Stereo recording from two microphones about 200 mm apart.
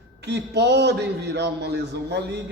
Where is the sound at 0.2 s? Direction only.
55° right (ahead or behind).